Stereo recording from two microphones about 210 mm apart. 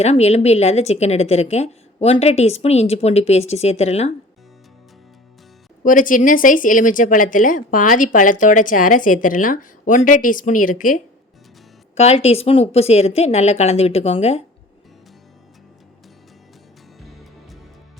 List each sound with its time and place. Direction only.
0.0 s speech: 30° left (ahead or behind)
5.8 s speech: 40° left (ahead or behind)